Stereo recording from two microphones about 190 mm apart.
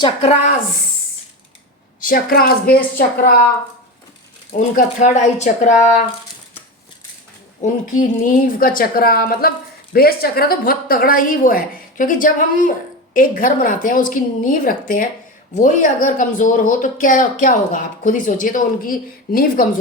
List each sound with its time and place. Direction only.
0.0 s speech: 30° left (ahead or behind)
2.0 s speech: 50° left (ahead or behind)
4.5 s speech: 40° left (ahead or behind)
7.6 s speech: 40° left (ahead or behind)